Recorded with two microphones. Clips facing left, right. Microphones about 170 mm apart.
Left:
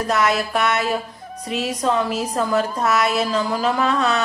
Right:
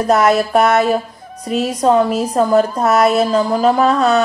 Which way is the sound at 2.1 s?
35° right (ahead or behind).